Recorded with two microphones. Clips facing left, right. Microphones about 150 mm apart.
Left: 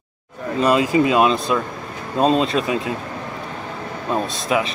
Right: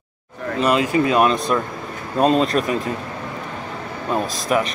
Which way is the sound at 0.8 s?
20° left (ahead or behind).